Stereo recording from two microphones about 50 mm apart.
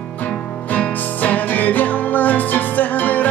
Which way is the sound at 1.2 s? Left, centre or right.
Left.